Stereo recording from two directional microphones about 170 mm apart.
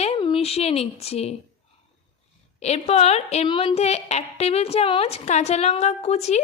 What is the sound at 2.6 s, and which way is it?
Speech, 40° left (ahead or behind).